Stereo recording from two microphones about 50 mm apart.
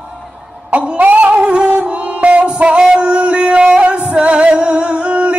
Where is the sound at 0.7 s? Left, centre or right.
Right.